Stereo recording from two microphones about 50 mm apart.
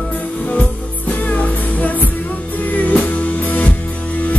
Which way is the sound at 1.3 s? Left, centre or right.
Left.